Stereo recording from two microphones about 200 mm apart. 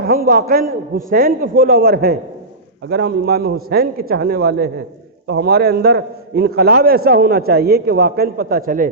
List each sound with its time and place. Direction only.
0.0 s a man's voice: 45° right (ahead or behind)